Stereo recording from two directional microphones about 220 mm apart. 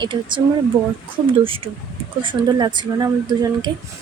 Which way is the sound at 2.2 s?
20° right (ahead or behind).